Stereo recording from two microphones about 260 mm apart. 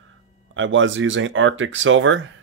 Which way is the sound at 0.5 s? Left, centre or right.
Right.